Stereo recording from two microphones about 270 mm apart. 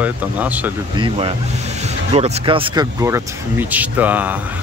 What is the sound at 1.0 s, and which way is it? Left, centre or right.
Speech, centre.